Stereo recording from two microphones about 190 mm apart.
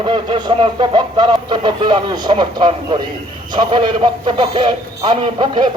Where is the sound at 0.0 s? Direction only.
25° right (ahead or behind).